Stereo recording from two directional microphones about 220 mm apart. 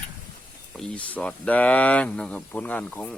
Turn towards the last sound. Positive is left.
turn(degrees=5)  # may be behind; listen again after turning